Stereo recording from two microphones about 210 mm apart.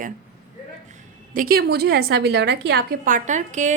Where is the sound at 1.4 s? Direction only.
45° right (ahead or behind).